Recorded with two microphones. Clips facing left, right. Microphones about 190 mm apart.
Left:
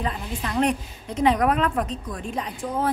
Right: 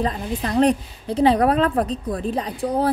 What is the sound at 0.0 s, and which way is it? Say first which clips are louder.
A woman's voice: right 5 dB; 35° right (ahead or behind).